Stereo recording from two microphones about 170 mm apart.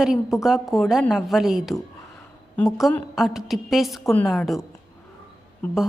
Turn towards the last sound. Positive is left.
turn(degrees=10)  # may be behind; listen again after turning